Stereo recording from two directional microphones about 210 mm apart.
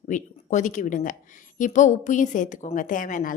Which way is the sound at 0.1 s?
35° left (ahead or behind).